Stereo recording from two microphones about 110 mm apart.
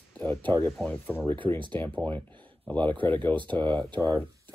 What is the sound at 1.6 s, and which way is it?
Speech, 45° right (ahead or behind).